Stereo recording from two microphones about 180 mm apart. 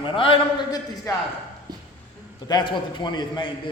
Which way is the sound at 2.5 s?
25° left (ahead or behind).